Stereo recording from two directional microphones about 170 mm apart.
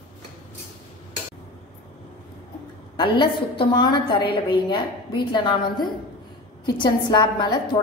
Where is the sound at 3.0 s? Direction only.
30° left (ahead or behind).